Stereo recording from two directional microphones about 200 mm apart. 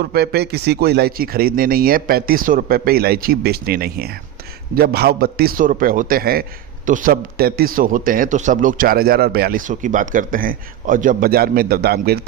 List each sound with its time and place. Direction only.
0.0 s a man's voice: 50° right (ahead or behind)